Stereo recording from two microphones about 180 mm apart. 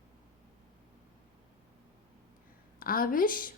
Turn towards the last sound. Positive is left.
turn(degrees=50)  # may be behind; listen again after turning